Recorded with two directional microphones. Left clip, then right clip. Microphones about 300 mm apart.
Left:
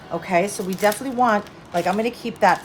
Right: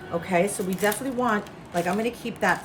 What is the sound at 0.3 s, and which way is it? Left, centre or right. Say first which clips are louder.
A woman's voice: left 4 dB; left.